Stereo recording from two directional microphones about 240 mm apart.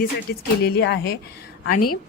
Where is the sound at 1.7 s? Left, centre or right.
Left.